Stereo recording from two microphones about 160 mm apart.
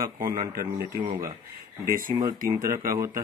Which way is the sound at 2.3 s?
60° right (ahead or behind).